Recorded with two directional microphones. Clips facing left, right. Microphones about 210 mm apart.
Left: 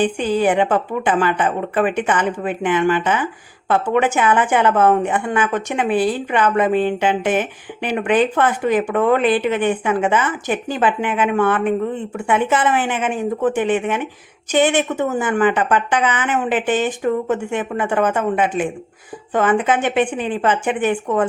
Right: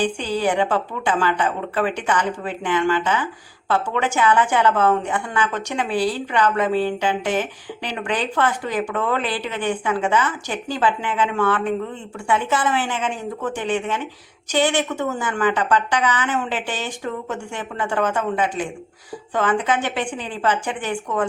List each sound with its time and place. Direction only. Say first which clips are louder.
0.3 s a woman's voice: left 5 dB; 20° left (ahead or behind)